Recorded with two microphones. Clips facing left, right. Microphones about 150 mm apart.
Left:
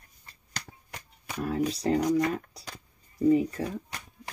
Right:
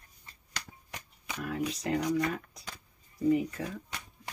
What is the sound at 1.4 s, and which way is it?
Speech, 35° left (ahead or behind).